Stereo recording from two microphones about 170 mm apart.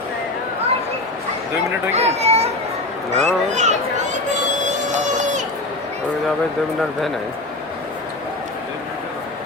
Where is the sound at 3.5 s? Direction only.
45° right (ahead or behind).